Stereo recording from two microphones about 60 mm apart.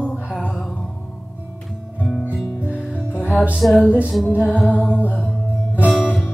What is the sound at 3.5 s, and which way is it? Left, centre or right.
Music, centre.